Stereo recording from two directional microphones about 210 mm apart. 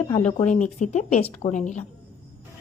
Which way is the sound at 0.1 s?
25° left (ahead or behind).